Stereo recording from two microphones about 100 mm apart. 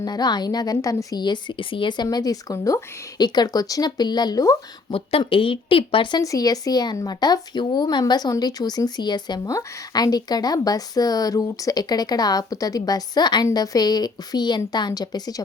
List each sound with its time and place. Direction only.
0.0 s speech: 40° left (ahead or behind)
4.9 s speech: 65° left (ahead or behind)
6.2 s speech: 35° left (ahead or behind)